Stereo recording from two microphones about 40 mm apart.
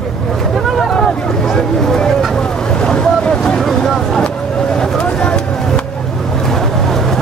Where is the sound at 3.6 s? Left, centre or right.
Centre.